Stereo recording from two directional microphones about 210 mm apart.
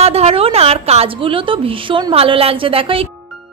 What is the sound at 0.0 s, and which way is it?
A woman's voice, 30° right (ahead or behind).